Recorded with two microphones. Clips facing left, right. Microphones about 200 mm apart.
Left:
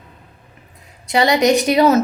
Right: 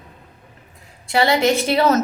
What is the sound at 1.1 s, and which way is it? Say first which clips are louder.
Speech: left 2 dB; 20° left (ahead or behind).